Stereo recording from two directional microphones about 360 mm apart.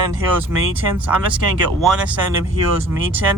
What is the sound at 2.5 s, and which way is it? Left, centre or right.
Speech, right.